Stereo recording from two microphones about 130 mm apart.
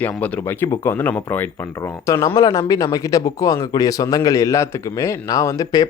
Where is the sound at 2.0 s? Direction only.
25° left (ahead or behind).